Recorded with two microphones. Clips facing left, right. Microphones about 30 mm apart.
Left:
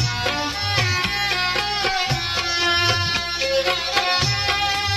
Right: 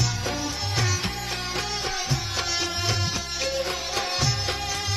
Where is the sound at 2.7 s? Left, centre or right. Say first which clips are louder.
Left 8 dB; left.